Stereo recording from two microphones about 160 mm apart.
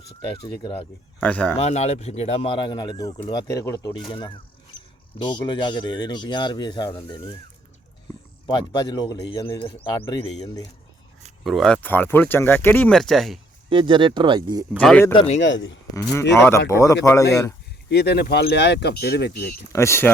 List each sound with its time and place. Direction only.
0.4 s speech: 35° left (ahead or behind)
1.2 s speech: 10° left (ahead or behind)
1.5 s speech: 40° left (ahead or behind); by 7.3 s 25° left (ahead or behind)
8.4 s speech: 30° left (ahead or behind)
11.4 s speech: centre (ahead or behind)
13.7 s speech: 30° right (ahead or behind)
14.8 s speech: 10° left (ahead or behind)
15.1 s speech: 35° left (ahead or behind)
16.5 s speech: 20° left (ahead or behind)
17.8 s speech: 90° left
19.7 s speech: 15° left (ahead or behind)